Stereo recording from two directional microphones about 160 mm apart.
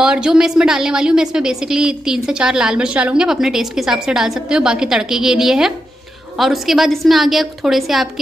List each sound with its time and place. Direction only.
0.0 s a woman's voice: 5° right (ahead or behind)